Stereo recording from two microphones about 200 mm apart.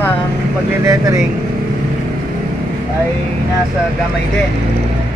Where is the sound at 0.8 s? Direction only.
15° right (ahead or behind).